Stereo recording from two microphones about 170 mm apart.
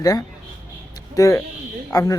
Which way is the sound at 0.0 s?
20° left (ahead or behind).